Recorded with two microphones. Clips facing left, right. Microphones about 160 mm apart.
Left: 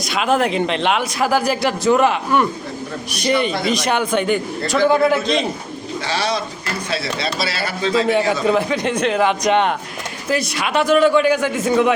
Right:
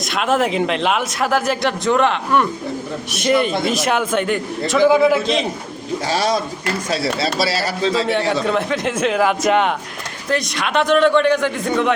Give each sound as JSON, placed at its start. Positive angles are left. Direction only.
{"t": 0.0, "sound": "a man's voice", "side_deg": 0}
{"t": 6.1, "sound": "speech", "side_deg": -45}
{"t": 8.3, "sound": "a man's voice", "side_deg": 0}